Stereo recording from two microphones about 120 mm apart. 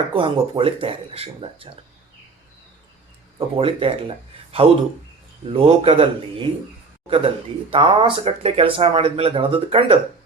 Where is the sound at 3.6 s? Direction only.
50° right (ahead or behind).